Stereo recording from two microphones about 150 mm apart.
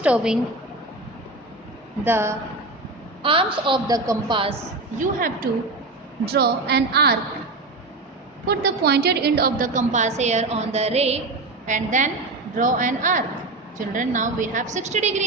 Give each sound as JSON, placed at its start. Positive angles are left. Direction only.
{"t": 0.0, "sound": "a woman's voice", "side_deg": -5}
{"t": 2.0, "sound": "a woman's voice", "side_deg": -15}
{"t": 3.2, "sound": "a woman's voice", "side_deg": -35}
{"t": 4.9, "sound": "a woman's voice", "side_deg": -70}
{"t": 6.2, "sound": "a woman's voice", "side_deg": -90}
{"t": 8.4, "sound": "a woman's voice", "side_deg": -90}
{"t": 11.6, "sound": "a woman's voice", "side_deg": -55}